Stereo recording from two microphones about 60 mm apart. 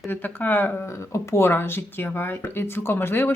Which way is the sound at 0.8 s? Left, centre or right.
Left.